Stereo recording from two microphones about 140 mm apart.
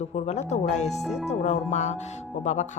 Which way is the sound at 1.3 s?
55° left (ahead or behind).